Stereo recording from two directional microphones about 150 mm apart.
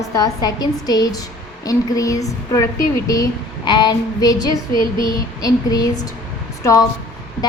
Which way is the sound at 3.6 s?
30° left (ahead or behind).